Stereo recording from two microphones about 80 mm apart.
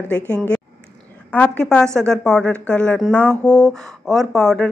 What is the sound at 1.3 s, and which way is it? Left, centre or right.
Speech, centre.